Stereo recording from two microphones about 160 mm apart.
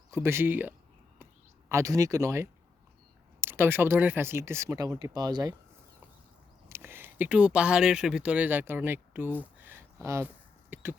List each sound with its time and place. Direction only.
0.1 s speech: 15° right (ahead or behind)
1.7 s speech: 20° right (ahead or behind)
6.7 s speech: 15° right (ahead or behind)